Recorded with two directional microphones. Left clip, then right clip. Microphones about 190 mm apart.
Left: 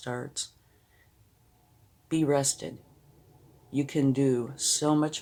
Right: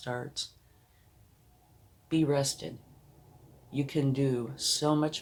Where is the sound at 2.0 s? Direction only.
45° left (ahead or behind).